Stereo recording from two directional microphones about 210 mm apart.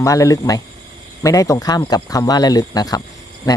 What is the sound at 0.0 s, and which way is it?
Speech, 15° left (ahead or behind).